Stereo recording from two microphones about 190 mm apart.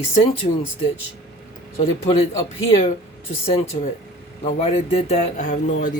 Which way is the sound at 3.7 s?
25° left (ahead or behind).